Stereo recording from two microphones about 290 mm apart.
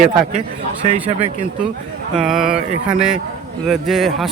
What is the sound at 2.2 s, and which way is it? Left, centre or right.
Speech, centre.